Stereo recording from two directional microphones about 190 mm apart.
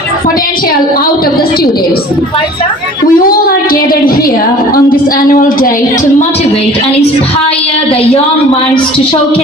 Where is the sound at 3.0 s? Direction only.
50° left (ahead or behind).